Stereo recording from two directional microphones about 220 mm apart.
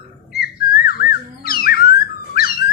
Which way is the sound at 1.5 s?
45° left (ahead or behind).